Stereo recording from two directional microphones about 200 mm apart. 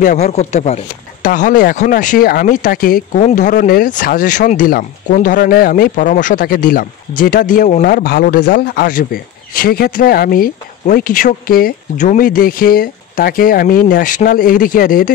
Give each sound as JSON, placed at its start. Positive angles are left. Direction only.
{"t": 0.0, "sound": "speech", "side_deg": 35}